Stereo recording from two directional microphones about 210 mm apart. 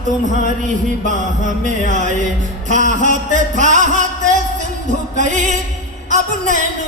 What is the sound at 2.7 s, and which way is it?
Speech, 35° right (ahead or behind).